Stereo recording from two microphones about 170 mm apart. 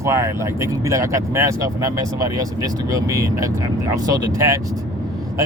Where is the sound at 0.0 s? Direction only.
15° right (ahead or behind).